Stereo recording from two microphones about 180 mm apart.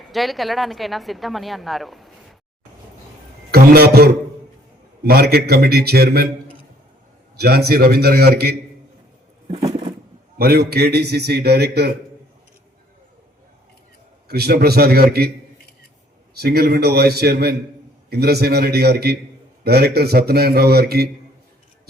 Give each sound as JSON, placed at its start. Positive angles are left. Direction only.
{"t": 0.0, "sound": "a woman's voice", "side_deg": 0}
{"t": 3.5, "sound": "a sound", "side_deg": -60}
{"t": 5.0, "sound": "a man's voice", "side_deg": -60}
{"t": 7.3, "sound": "a man's voice", "side_deg": -60}
{"t": 9.5, "sound": "a sound", "side_deg": -30}
{"t": 10.3, "sound": "a man's voice", "side_deg": -60}
{"t": 14.3, "sound": "a man's voice", "side_deg": -60}
{"t": 16.4, "sound": "a man's voice", "side_deg": -60}